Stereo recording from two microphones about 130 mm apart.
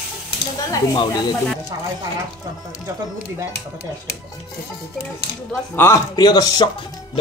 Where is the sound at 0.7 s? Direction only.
30° left (ahead or behind).